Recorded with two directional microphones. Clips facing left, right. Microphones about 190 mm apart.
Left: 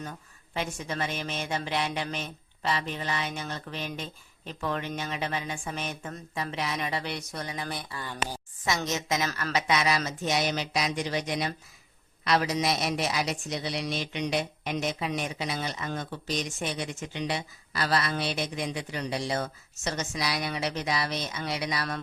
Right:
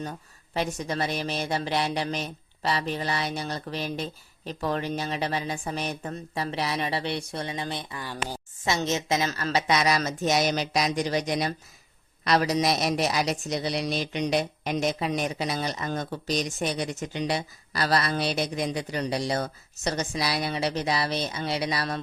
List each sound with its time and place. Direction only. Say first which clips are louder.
0.0 s a woman's voice: right 4 dB; 35° right (ahead or behind)
8.0 s speech: left 1 dB; 10° right (ahead or behind)
8.6 s a woman's voice: right 3 dB; 25° right (ahead or behind)